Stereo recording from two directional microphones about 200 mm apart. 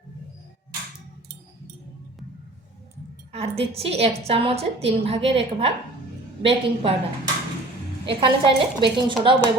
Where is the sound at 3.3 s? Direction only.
30° right (ahead or behind).